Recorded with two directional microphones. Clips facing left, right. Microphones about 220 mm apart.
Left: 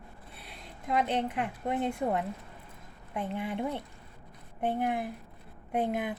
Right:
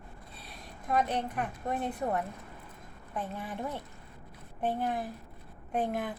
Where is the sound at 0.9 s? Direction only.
20° left (ahead or behind).